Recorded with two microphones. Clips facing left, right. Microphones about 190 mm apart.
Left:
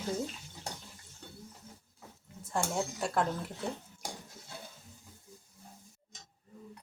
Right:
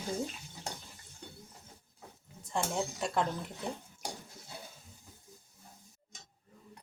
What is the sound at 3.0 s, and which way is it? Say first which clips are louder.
Speech: left 1 dB; centre (ahead or behind).